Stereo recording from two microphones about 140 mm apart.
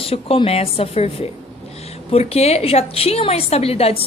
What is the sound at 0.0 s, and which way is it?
A woman's voice, 40° left (ahead or behind).